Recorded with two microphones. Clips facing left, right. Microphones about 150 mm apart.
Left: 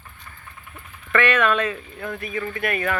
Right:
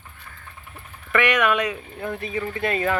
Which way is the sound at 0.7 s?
10° right (ahead or behind).